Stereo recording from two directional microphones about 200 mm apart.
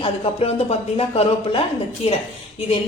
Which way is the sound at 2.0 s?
30° left (ahead or behind).